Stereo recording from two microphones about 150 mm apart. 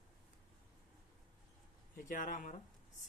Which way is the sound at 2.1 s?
60° left (ahead or behind).